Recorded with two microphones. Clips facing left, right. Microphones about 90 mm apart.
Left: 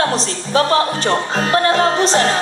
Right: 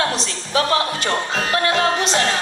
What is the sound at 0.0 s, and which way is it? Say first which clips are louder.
Speech: left 4 dB; 35° left (ahead or behind).